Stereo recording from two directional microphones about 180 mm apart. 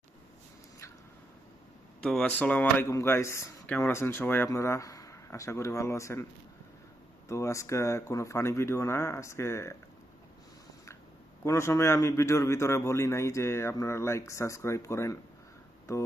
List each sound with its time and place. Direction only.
2.0 s speech: 5° left (ahead or behind)
7.3 s speech: 15° left (ahead or behind)
11.4 s speech: 15° left (ahead or behind)